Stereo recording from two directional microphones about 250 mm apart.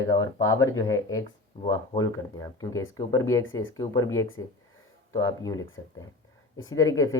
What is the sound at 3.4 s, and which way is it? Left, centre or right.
Speech, left.